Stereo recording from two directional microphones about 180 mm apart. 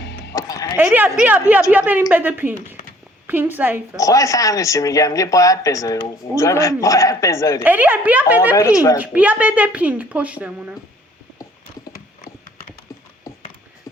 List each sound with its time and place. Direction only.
0.3 s music: 20° left (ahead or behind)
0.8 s a woman's voice: 10° right (ahead or behind)
3.9 s speech: 20° left (ahead or behind)
7.6 s a woman's voice: 10° right (ahead or behind)
8.5 s speech: 20° left (ahead or behind)
9.0 s a woman's voice: 10° right (ahead or behind)
11.9 s clip-clop: 55° left (ahead or behind)